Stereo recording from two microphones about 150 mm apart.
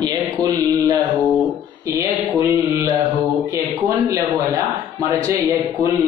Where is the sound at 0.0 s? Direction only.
25° right (ahead or behind).